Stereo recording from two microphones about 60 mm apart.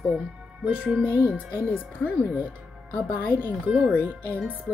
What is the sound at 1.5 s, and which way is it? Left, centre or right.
Speech, left.